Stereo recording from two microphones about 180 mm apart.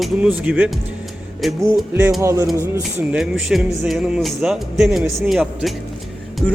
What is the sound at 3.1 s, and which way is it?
Speech, 5° right (ahead or behind).